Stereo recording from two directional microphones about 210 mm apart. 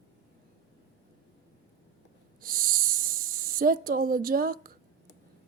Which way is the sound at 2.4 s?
45° right (ahead or behind).